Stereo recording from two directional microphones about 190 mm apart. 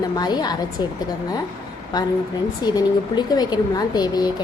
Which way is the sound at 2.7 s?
20° left (ahead or behind).